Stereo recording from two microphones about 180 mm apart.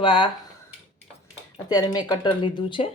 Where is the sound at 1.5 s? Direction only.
20° left (ahead or behind).